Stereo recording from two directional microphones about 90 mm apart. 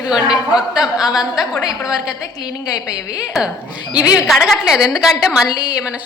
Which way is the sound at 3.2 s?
10° right (ahead or behind).